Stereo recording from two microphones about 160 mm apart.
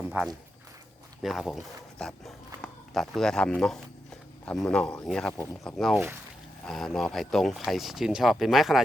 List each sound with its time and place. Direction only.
1.2 s speech: centre (ahead or behind)